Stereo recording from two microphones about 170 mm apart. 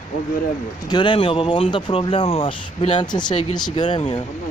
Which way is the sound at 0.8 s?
25° left (ahead or behind).